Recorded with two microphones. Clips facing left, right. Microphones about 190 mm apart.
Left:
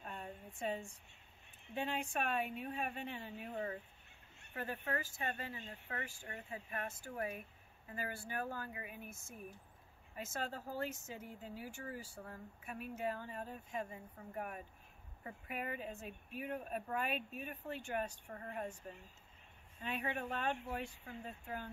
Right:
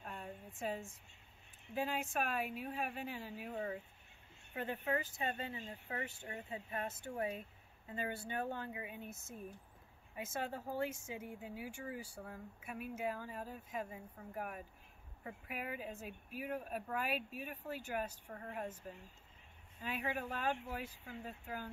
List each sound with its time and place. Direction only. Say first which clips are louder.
0.0 s a sound: even; centre (ahead or behind)
1.8 s speech: right 1 dB; 5° right (ahead or behind)
4.6 s speech: right 3 dB; 20° right (ahead or behind); by 18.8 s 5° right (ahead or behind)
19.8 s speech: even; 5° right (ahead or behind)